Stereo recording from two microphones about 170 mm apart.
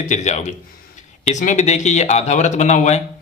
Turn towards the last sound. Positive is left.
turn(degrees=45)  # may be behind; listen again after turning